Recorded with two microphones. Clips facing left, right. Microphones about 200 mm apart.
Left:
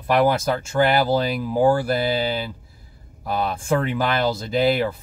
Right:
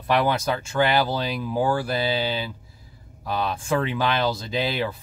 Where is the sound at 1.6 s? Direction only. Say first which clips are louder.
Left 5 dB; 45° left (ahead or behind).